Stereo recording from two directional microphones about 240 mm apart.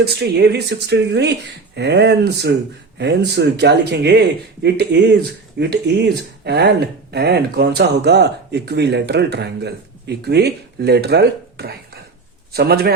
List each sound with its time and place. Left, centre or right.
0.0 s a man's voice: right